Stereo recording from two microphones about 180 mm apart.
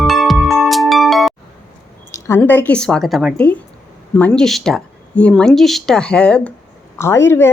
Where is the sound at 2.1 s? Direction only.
15° left (ahead or behind).